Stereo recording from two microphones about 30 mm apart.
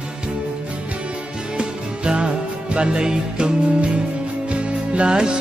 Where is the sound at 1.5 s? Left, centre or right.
Right.